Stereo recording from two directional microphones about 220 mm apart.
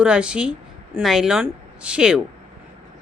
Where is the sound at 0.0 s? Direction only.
5° right (ahead or behind).